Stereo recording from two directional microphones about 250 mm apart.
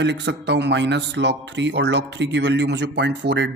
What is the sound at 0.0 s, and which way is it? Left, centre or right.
Speech, right.